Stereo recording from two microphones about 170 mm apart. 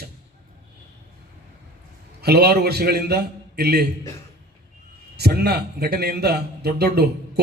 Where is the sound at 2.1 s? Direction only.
70° right (ahead or behind).